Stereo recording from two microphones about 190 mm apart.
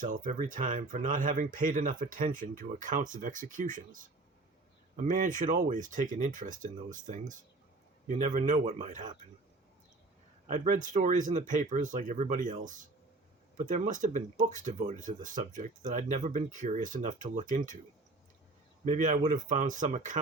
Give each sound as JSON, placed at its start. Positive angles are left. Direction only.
{"t": 0.0, "sound": "speech", "side_deg": -45}
{"t": 10.5, "sound": "speech", "side_deg": -40}
{"t": 18.9, "sound": "speech", "side_deg": -40}